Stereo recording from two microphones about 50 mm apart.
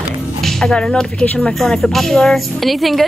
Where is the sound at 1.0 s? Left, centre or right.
Centre.